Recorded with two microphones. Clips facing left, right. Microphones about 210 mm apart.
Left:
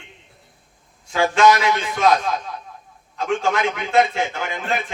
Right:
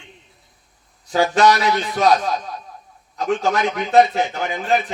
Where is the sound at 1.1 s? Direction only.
40° right (ahead or behind).